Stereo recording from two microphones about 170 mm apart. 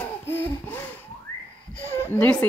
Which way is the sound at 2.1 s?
5° left (ahead or behind).